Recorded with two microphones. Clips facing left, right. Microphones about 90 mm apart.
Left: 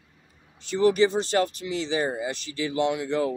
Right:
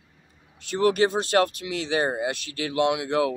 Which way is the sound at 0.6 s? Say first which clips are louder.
Left 1 dB; 60° right (ahead or behind).